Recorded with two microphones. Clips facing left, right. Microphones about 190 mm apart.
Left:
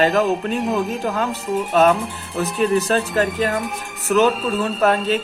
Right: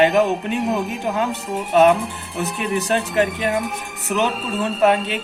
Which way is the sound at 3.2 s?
Centre (ahead or behind).